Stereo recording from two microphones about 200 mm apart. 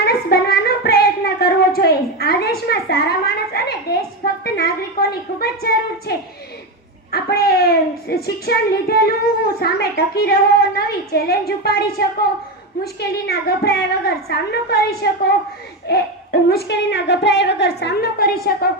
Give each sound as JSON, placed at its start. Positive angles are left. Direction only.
{"t": 0.0, "sound": "child singing", "side_deg": 50}
{"t": 4.4, "sound": "a woman's voice", "side_deg": 50}